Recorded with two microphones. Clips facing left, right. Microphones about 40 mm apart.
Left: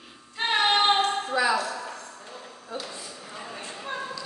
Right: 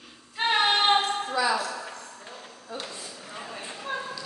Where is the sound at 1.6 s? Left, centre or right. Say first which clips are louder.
Left 1 dB; centre.